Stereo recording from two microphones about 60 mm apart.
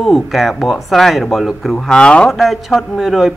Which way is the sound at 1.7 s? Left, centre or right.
Centre.